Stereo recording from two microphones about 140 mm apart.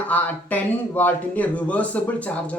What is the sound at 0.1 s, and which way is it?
Speech, 10° left (ahead or behind).